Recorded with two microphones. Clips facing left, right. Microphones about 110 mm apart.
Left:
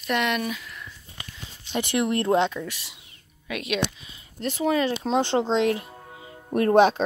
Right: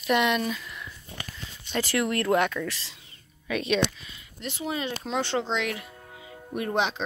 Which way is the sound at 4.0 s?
25° left (ahead or behind).